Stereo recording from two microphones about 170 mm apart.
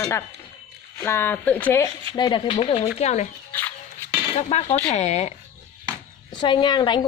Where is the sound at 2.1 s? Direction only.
25° left (ahead or behind).